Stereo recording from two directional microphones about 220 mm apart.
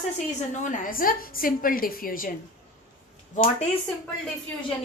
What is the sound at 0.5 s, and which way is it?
A woman's voice, 35° left (ahead or behind).